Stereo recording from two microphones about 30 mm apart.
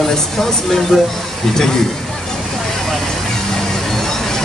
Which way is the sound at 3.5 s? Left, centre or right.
Centre.